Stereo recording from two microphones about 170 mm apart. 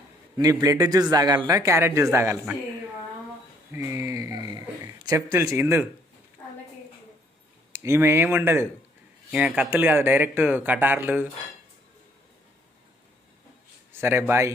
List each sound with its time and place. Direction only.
0.4 s speech: 20° right (ahead or behind)
3.7 s a sound: 15° right (ahead or behind)
7.7 s speech: 15° right (ahead or behind)
13.9 s speech: 15° right (ahead or behind)